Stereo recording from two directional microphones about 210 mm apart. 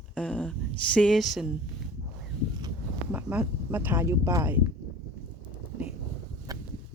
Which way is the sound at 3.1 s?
5° right (ahead or behind).